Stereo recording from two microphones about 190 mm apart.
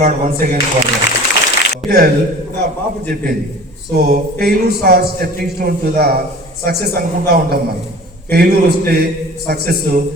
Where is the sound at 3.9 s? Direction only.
55° right (ahead or behind).